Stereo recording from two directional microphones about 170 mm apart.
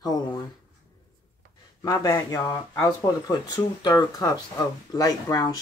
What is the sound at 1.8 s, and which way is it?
Speech, 20° left (ahead or behind).